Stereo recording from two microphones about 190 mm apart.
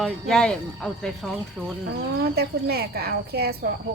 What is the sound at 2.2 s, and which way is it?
Speech, 55° right (ahead or behind).